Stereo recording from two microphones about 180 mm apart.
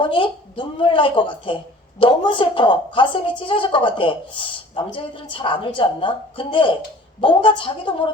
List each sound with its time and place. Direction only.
0.0 s a woman's voice: 30° left (ahead or behind)